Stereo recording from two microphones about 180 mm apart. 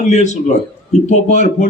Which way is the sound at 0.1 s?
40° left (ahead or behind).